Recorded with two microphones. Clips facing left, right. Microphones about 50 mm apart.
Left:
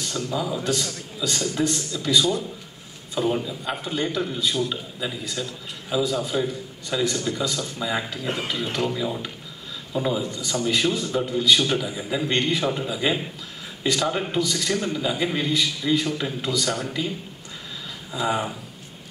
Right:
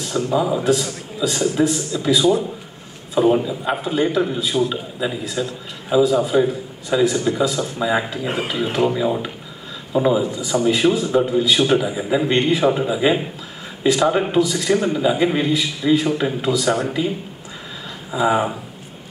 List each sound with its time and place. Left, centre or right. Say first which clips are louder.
0.0 s a man's voice: right 7 dB; centre
0.7 s a man's voice: right 7 dB; centre
18.1 s a man's voice: right 7 dB; centre